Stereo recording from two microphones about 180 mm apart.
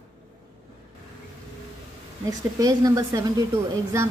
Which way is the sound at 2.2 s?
20° right (ahead or behind).